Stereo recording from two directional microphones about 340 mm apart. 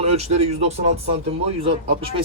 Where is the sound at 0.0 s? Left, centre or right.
Centre.